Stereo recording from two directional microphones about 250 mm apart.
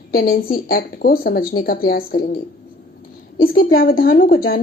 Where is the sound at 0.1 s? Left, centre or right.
Left.